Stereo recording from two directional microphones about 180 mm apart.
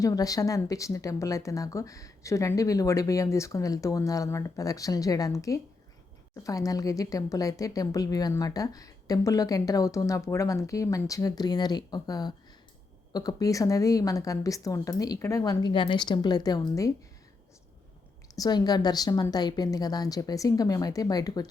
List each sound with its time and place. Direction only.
0.0 s a woman's voice: 20° left (ahead or behind)
18.3 s a woman's voice: 20° left (ahead or behind)